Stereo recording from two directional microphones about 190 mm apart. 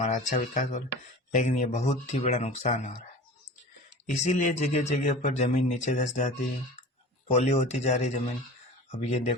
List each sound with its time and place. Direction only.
0.0 s speech: 40° left (ahead or behind)
4.2 s speech: 40° left (ahead or behind)